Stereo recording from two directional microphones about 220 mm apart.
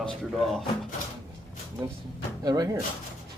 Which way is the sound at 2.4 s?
15° right (ahead or behind).